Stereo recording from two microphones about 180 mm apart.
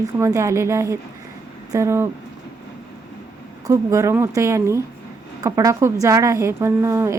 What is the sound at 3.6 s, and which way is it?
A woman's voice, 15° right (ahead or behind).